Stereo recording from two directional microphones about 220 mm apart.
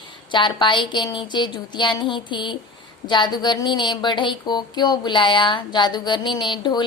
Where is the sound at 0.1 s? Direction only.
20° left (ahead or behind).